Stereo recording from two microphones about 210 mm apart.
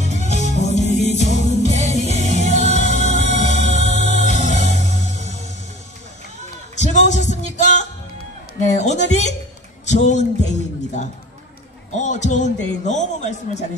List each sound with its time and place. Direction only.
0.0 s music: 35° left (ahead or behind)
6.8 s a sound: 35° left (ahead or behind)
8.5 s a man's voice: 35° left (ahead or behind)